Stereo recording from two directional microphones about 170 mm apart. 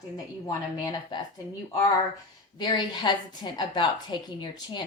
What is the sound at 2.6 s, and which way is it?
A woman's voice, 25° left (ahead or behind).